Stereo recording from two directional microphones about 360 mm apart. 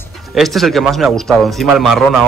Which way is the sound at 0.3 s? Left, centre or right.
Centre.